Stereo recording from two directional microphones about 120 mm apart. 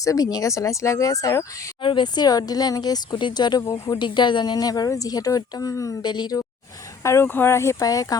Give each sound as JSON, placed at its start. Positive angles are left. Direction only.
{"t": 0.0, "sound": "speech", "side_deg": 30}
{"t": 1.8, "sound": "a woman's voice", "side_deg": 40}
{"t": 7.0, "sound": "speech", "side_deg": 20}